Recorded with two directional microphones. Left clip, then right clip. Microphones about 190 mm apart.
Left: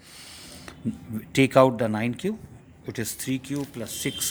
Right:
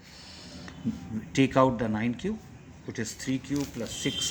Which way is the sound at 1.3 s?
50° left (ahead or behind).